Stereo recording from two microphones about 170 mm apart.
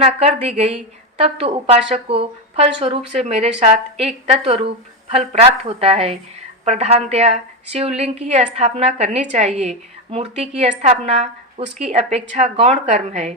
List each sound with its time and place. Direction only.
0.0 s a woman's voice: 35° right (ahead or behind)